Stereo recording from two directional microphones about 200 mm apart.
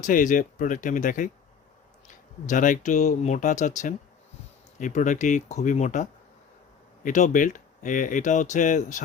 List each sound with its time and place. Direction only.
0.0 s speech: 40° left (ahead or behind)
2.5 s speech: 40° left (ahead or behind)